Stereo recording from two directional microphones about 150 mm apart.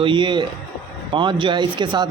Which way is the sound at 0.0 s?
30° right (ahead or behind).